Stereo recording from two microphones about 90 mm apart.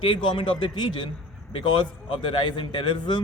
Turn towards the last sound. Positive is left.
turn(degrees=55)  # may be behind; listen again after turning